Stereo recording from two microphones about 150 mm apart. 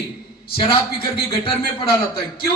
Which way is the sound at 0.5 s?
35° left (ahead or behind).